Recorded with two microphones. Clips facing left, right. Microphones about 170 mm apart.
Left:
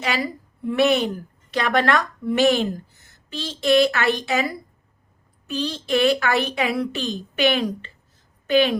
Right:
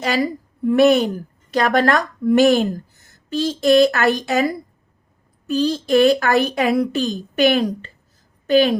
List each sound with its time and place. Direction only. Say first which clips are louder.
0.0 s a woman's voice: right 5 dB; 40° right (ahead or behind)